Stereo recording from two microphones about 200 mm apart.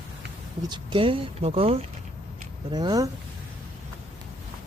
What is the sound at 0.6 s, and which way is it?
Speech, 25° right (ahead or behind).